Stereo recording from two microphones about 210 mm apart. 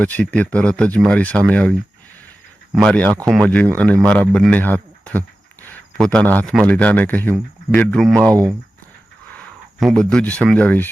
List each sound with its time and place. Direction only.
0.0 s speech: 5° left (ahead or behind)
2.7 s a man's voice: 5° left (ahead or behind)
8.3 s speech: 15° right (ahead or behind)
9.8 s speech: 5° left (ahead or behind)